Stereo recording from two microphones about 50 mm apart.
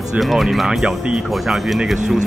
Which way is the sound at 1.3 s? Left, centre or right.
Centre.